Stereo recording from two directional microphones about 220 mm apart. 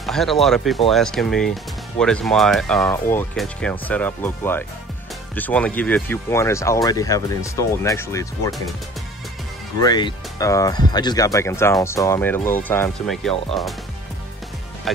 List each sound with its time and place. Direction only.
0.0 s speech: centre (ahead or behind)
9.8 s speech: 20° left (ahead or behind); by 13.4 s centre (ahead or behind)